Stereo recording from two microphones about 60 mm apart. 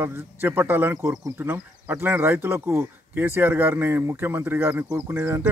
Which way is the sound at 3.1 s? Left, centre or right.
Right.